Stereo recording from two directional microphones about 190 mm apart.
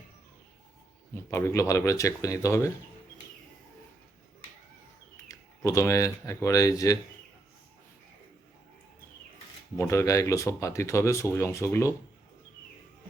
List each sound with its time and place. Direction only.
1.3 s speech: 15° left (ahead or behind)
5.3 s speech: 15° left (ahead or behind)
9.7 s speech: 15° left (ahead or behind)